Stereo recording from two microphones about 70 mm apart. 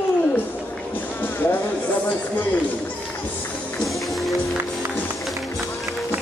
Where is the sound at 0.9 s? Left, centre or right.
Left.